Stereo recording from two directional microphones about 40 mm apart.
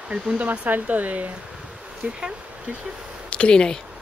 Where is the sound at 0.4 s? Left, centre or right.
Right.